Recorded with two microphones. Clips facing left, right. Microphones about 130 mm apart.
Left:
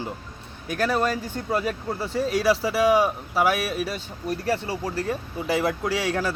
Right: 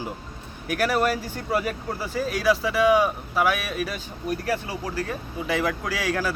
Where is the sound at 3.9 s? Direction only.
30° left (ahead or behind).